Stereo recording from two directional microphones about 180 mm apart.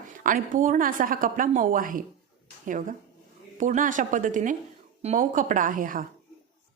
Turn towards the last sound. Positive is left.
turn(degrees=-50)  # may be behind; listen again after turning